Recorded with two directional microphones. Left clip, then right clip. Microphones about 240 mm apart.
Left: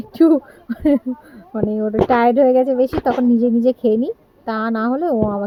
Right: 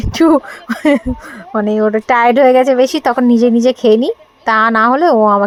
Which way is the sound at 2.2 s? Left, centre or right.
Centre.